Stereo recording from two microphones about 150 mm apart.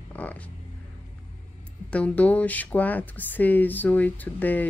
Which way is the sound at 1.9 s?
10° left (ahead or behind).